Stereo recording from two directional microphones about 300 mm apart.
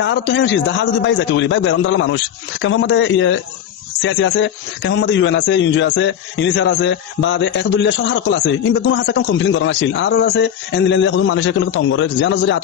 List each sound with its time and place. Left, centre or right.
0.0 s a man's voice: left